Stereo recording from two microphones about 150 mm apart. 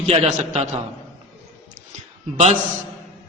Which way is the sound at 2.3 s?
45° right (ahead or behind).